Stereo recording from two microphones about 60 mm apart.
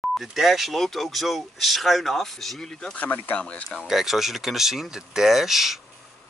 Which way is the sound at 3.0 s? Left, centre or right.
Left.